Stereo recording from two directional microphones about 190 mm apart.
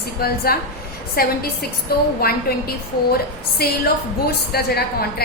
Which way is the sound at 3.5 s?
55° left (ahead or behind).